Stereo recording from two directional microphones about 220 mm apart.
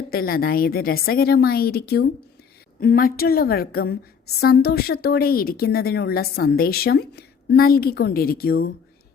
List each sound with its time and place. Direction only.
0.1 s speech: 40° left (ahead or behind)